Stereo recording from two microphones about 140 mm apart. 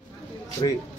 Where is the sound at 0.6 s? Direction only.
35° left (ahead or behind).